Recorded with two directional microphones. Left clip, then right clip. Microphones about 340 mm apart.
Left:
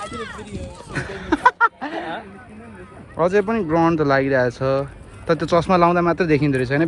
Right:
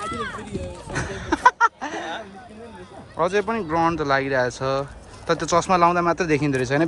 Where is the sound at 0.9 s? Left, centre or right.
Centre.